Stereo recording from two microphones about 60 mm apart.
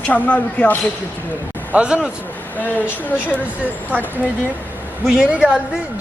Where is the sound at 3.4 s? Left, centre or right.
Right.